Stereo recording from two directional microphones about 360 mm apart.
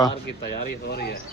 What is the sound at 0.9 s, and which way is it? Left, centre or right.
Speech, left.